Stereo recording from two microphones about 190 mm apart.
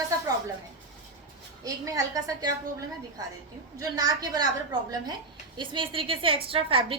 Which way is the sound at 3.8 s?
20° right (ahead or behind).